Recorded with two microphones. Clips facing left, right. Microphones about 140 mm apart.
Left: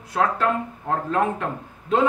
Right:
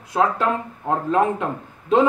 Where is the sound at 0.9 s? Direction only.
20° right (ahead or behind).